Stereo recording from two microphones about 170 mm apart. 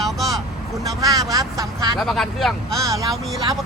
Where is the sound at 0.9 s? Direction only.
20° right (ahead or behind).